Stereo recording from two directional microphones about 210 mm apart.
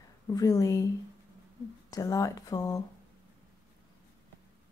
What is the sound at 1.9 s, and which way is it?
Speech, 15° left (ahead or behind).